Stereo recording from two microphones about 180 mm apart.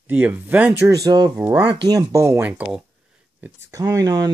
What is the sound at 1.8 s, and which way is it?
Speech, 20° right (ahead or behind).